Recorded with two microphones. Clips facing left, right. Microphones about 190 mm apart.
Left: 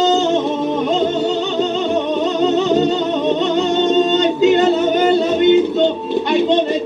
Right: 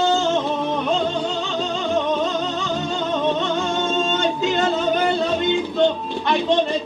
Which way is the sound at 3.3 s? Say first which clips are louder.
Left 6 dB; 20° left (ahead or behind).